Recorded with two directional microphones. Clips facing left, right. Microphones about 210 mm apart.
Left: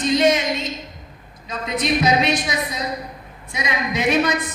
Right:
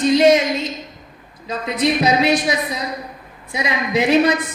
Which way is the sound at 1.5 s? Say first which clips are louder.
Right 3 dB; 30° right (ahead or behind).